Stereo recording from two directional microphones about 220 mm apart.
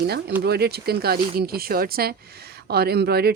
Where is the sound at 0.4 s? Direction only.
45° right (ahead or behind).